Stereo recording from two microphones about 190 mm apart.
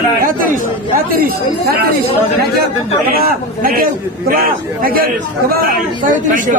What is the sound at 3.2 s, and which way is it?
A man's voice, 50° right (ahead or behind).